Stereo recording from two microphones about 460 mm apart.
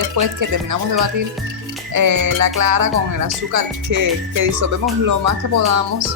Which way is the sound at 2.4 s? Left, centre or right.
Right.